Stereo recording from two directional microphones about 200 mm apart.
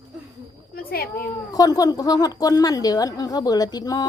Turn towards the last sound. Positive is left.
turn(degrees=20)  # may be behind; listen again after turning